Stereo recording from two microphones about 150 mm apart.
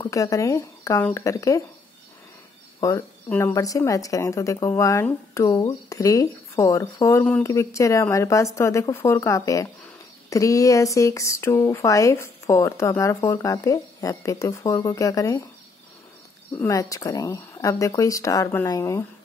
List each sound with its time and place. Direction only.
0.0 s speech: 20° left (ahead or behind)
2.8 s speech: 20° left (ahead or behind)
16.5 s speech: 20° left (ahead or behind)